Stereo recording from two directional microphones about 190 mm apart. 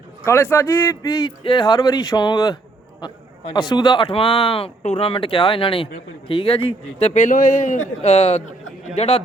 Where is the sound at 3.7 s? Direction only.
20° left (ahead or behind).